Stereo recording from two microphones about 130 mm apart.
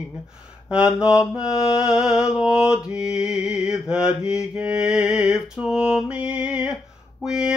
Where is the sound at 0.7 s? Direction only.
5° right (ahead or behind).